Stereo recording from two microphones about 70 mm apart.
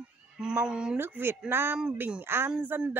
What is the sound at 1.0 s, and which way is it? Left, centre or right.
Speech, right.